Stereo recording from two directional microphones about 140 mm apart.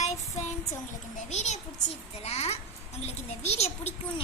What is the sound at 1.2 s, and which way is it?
Speech, 55° left (ahead or behind).